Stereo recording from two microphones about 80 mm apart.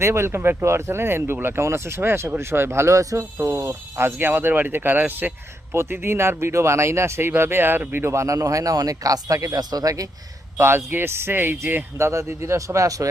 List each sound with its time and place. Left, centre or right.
0.0 s speech: right
8.0 s speech: right
10.6 s speech: right